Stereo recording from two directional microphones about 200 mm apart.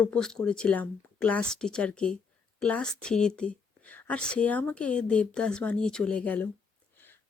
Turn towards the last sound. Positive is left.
turn(degrees=5)  # may be behind; listen again after turning